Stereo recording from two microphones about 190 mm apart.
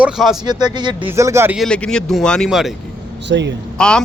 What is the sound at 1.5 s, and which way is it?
Speech, 5° left (ahead or behind).